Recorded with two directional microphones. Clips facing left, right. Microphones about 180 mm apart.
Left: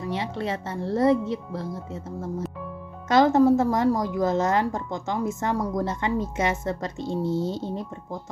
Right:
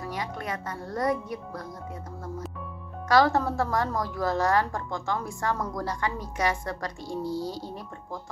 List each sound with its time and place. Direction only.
0.0 s a woman's voice: 25° left (ahead or behind)
3.1 s a woman's voice: 20° left (ahead or behind)